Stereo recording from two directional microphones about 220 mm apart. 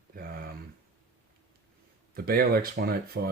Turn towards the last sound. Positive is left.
turn(degrees=-45)  # may be behind; listen again after turning